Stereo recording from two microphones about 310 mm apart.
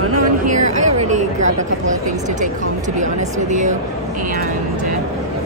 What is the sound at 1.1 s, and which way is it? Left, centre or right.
Speech, right.